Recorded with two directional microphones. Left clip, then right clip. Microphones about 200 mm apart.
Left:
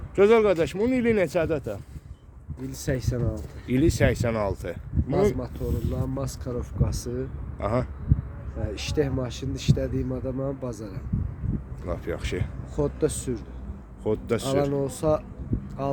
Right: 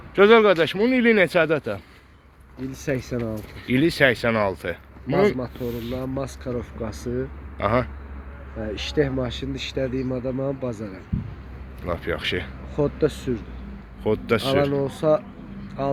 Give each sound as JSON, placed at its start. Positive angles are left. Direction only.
{"t": 0.2, "sound": "speech", "side_deg": 10}
{"t": 2.7, "sound": "speech", "side_deg": -25}
{"t": 3.7, "sound": "speech", "side_deg": 10}
{"t": 5.6, "sound": "speech", "side_deg": 30}
{"t": 6.0, "sound": "speech", "side_deg": -20}
{"t": 7.6, "sound": "speech", "side_deg": 10}
{"t": 8.5, "sound": "speech", "side_deg": -25}
{"t": 11.9, "sound": "speech", "side_deg": 10}
{"t": 12.7, "sound": "speech", "side_deg": -25}
{"t": 14.0, "sound": "speech", "side_deg": 10}
{"t": 14.6, "sound": "speech", "side_deg": -20}